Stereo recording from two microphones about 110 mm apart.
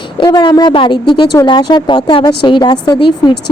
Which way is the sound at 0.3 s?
35° left (ahead or behind).